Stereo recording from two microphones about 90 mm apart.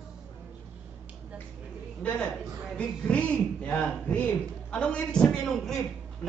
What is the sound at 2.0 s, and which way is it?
A man's voice, 15° left (ahead or behind).